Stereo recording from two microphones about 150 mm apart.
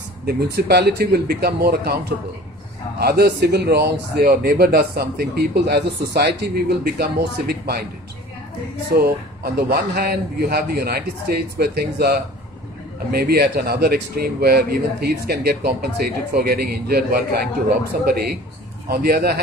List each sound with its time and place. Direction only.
0.3 s speech: 90° right
3.0 s speech: 90° right
8.9 s speech: 90° right
17.9 s a man's voice: 75° right (ahead or behind)
18.9 s speech: 90° right